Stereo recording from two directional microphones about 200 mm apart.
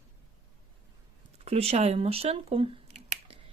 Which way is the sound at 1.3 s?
30° right (ahead or behind).